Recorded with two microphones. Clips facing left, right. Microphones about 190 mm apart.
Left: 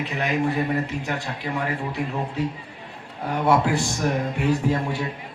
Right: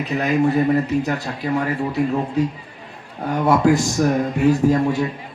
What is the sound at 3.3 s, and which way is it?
A man's voice, 45° right (ahead or behind).